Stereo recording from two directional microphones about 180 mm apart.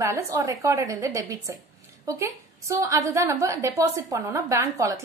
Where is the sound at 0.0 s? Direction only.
15° right (ahead or behind).